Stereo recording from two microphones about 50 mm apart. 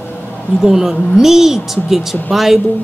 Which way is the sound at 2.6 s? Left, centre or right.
Left.